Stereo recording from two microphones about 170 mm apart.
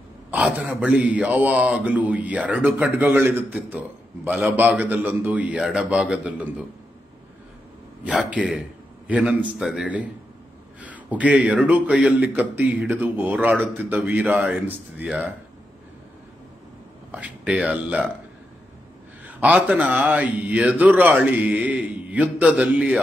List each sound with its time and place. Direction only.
0.3 s speech: 5° right (ahead or behind)
8.0 s a man's voice: 5° right (ahead or behind)
17.1 s speech: 5° right (ahead or behind)
19.2 s speech: 5° right (ahead or behind)